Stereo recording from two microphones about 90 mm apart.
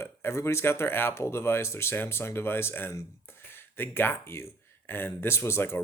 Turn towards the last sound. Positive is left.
turn(degrees=30)  # may be behind; listen again after turning